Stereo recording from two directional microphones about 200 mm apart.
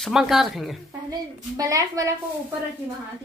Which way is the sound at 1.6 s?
15° right (ahead or behind).